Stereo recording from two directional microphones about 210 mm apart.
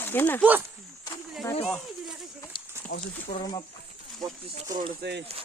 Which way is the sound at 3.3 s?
20° left (ahead or behind).